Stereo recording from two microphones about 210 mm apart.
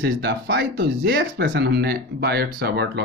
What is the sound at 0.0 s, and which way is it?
Speech, 55° right (ahead or behind).